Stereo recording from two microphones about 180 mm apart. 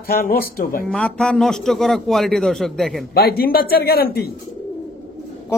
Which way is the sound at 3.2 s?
60° left (ahead or behind).